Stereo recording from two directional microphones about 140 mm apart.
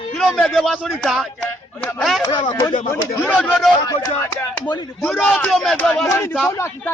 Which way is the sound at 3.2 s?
10° left (ahead or behind).